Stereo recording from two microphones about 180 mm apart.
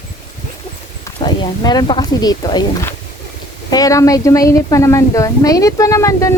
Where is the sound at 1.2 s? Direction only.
25° left (ahead or behind).